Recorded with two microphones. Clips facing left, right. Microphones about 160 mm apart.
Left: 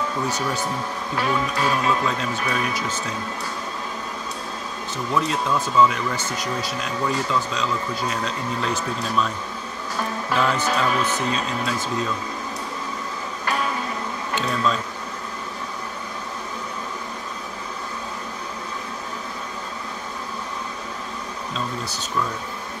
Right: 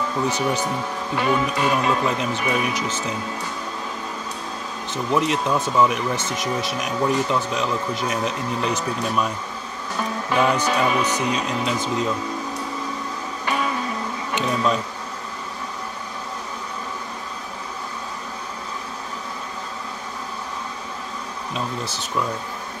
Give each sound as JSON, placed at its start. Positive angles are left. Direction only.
{"t": 1.1, "sound": "music", "side_deg": -5}
{"t": 2.0, "sound": "speech", "side_deg": -15}
{"t": 4.9, "sound": "speech", "side_deg": -20}
{"t": 10.3, "sound": "speech", "side_deg": -15}
{"t": 10.7, "sound": "music", "side_deg": -5}
{"t": 11.0, "sound": "speech", "side_deg": -15}
{"t": 14.3, "sound": "speech", "side_deg": -15}